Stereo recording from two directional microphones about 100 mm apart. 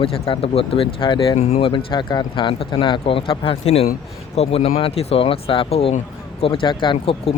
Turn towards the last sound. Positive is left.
turn(degrees=55)  # may be behind; listen again after turning